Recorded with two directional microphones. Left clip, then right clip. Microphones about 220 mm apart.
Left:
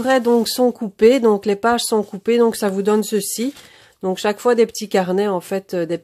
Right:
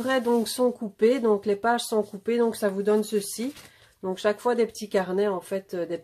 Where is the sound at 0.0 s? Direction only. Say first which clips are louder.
Left 8 dB; 40° left (ahead or behind).